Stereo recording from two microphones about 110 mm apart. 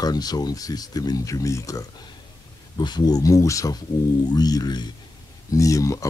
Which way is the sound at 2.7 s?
40° left (ahead or behind).